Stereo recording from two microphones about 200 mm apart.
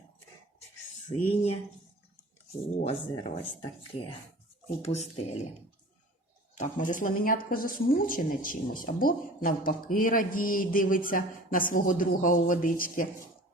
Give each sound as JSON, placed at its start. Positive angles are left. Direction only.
{"t": 1.0, "sound": "speech", "side_deg": 30}
{"t": 2.8, "sound": "speech", "side_deg": 30}
{"t": 6.6, "sound": "speech", "side_deg": 40}